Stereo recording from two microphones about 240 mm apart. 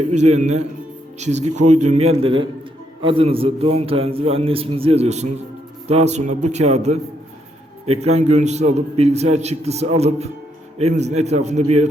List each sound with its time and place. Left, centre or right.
0.1 s a man's voice: right